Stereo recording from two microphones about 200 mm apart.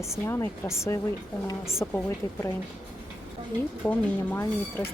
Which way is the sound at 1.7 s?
15° left (ahead or behind).